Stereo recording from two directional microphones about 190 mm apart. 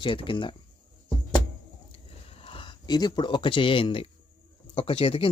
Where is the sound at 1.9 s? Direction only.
30° left (ahead or behind).